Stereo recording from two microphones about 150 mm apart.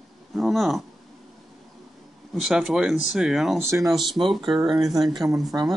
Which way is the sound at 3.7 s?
20° right (ahead or behind).